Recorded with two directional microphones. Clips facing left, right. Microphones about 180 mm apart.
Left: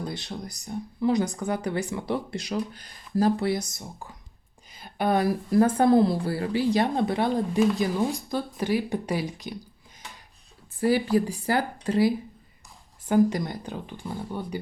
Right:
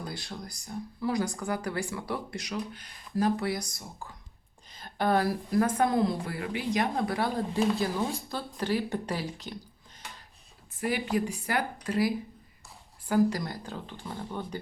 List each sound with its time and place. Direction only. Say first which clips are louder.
0.0 s speech: left 5 dB; 20° left (ahead or behind)
4.7 s speech: left 2 dB; 10° left (ahead or behind)
10.8 s a woman's voice: left 7 dB; 35° left (ahead or behind); by 14.6 s 10° left (ahead or behind)